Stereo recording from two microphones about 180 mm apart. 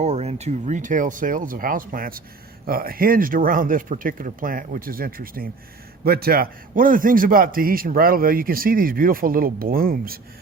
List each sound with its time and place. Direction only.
0.0 s a man's voice: 40° right (ahead or behind)